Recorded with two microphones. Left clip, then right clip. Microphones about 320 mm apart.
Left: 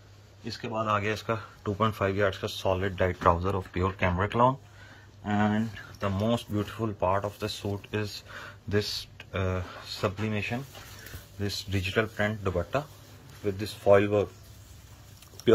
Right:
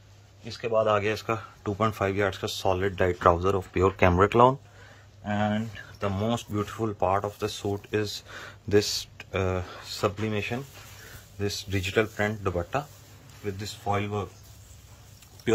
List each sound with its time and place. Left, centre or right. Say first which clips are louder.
0.7 s speech: right 5 dB; centre
5.9 s speech: even; centre
13.4 s speech: left 3 dB; centre